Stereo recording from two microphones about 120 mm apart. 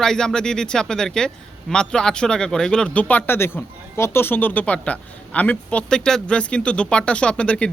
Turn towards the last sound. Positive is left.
turn(degrees=10)  # may be behind; listen again after turning